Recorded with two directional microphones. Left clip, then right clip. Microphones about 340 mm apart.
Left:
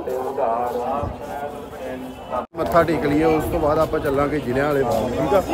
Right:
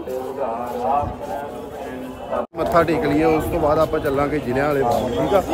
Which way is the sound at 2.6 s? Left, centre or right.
Centre.